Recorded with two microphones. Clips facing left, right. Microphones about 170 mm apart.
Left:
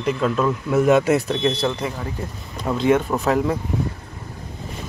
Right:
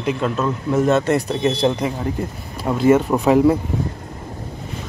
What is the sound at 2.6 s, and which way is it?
Speech, 5° right (ahead or behind).